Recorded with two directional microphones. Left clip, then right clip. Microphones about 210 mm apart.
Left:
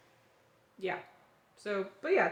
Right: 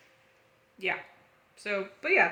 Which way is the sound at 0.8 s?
10° right (ahead or behind).